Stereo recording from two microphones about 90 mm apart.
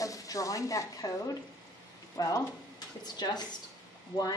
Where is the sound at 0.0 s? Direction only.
40° left (ahead or behind).